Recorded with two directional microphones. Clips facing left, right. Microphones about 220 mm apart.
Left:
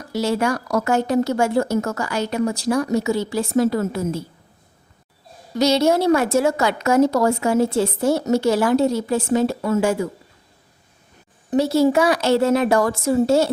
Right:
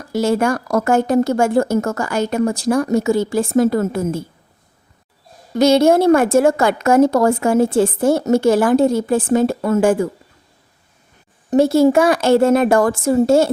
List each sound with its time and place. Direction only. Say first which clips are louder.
0.1 s a woman's voice: right 4 dB; 50° right (ahead or behind)
5.5 s a woman's voice: right 5 dB; 50° right (ahead or behind)
11.5 s a woman's voice: right 4 dB; 50° right (ahead or behind)